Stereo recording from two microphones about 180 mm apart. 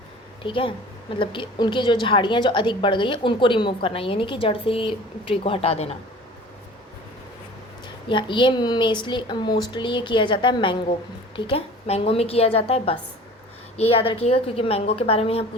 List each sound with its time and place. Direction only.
0.4 s a woman's voice: 30° left (ahead or behind)
8.1 s a woman's voice: 25° left (ahead or behind)